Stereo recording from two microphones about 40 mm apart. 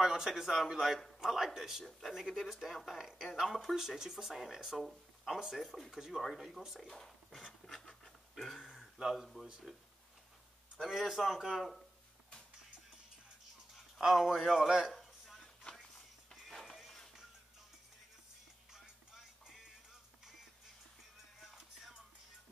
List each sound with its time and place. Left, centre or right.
0.0 s speech: centre
4.7 s speech: centre
5.9 s speech: centre
7.8 s scratch: centre
8.5 s speech: centre
10.8 s speech: centre
14.0 s speech: centre
14.9 s a sound: centre
16.4 s music: centre
18.7 s music: centre
21.4 s music: centre